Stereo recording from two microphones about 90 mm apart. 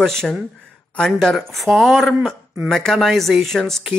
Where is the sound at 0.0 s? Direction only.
5° left (ahead or behind).